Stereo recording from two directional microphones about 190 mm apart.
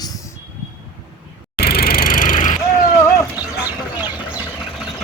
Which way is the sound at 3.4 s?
10° right (ahead or behind).